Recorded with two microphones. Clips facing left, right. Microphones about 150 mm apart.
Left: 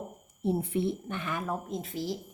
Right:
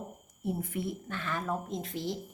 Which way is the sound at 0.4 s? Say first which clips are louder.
Left 6 dB; 30° left (ahead or behind).